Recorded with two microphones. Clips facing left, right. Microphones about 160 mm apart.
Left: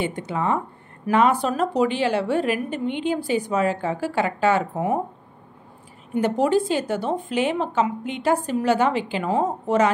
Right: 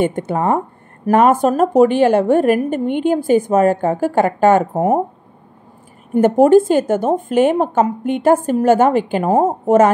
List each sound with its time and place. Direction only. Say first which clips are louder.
0.0 s a woman's voice: right 8 dB; 50° right (ahead or behind)
6.1 s a woman's voice: right 10 dB; 50° right (ahead or behind)